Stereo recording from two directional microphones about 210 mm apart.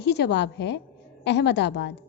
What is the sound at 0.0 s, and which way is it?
A woman's voice, 55° left (ahead or behind).